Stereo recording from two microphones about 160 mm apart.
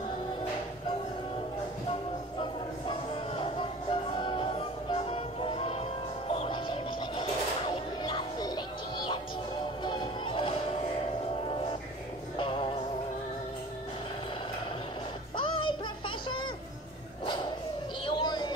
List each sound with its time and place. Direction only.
2.3 s music: 30° left (ahead or behind)
12.4 s music: 35° left (ahead or behind)
15.3 s music: 30° left (ahead or behind)
18.0 s a sound: 30° left (ahead or behind)